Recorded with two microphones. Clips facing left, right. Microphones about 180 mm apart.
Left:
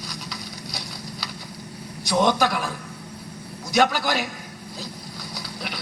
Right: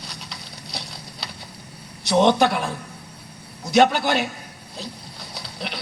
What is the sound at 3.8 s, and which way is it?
Speech, 25° right (ahead or behind).